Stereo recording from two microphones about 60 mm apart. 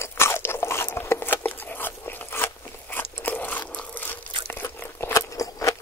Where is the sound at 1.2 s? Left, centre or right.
Left.